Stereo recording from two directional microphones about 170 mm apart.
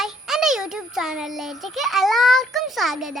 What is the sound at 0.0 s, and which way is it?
A child's voice, centre (ahead or behind).